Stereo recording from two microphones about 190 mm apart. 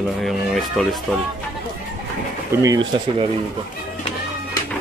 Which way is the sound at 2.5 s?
15° right (ahead or behind).